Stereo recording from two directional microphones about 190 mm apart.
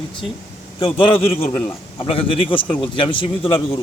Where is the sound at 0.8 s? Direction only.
25° left (ahead or behind).